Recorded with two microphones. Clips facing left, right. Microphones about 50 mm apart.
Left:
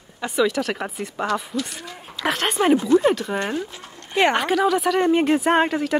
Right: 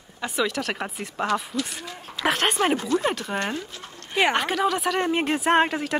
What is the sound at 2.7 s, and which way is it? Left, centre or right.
Speech, centre.